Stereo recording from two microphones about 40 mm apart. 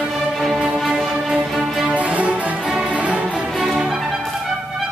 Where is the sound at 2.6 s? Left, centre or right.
Centre.